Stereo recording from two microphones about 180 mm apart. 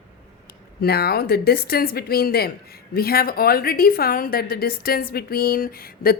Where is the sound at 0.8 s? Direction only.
60° left (ahead or behind).